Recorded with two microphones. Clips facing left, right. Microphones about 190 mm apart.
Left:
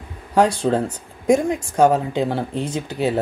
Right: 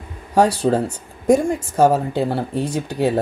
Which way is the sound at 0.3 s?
10° right (ahead or behind).